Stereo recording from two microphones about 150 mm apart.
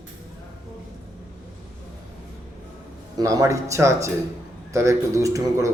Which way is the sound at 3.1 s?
25° right (ahead or behind).